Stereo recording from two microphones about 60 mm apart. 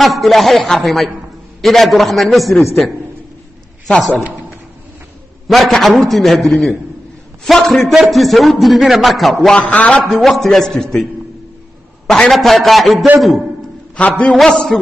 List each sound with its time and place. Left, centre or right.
0.0 s a man's voice: centre
3.8 s a man's voice: centre
5.5 s a man's voice: centre
9.6 s a man's voice: left
10.0 s a man's voice: centre
12.1 s a man's voice: centre
13.9 s a man's voice: left
14.5 s a sound: centre